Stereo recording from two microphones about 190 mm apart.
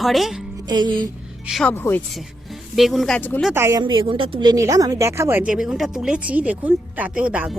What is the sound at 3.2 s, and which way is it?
Speech, 10° left (ahead or behind).